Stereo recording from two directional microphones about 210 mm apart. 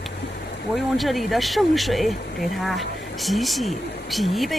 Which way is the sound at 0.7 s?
Centre (ahead or behind).